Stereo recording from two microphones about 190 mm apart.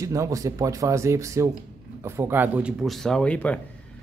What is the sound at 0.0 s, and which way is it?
Speech, 15° right (ahead or behind).